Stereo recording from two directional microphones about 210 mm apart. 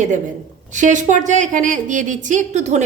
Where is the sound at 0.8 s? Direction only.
35° right (ahead or behind).